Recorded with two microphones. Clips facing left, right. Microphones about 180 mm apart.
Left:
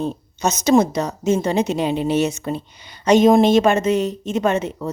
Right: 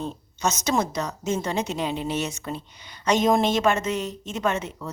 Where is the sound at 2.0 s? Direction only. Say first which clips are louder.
Left 9 dB; 70° left (ahead or behind).